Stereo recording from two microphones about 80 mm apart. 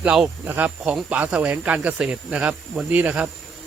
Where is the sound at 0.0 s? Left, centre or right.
Centre.